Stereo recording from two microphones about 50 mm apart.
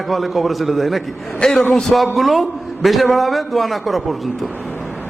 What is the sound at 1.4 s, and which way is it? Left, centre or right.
Speech, centre.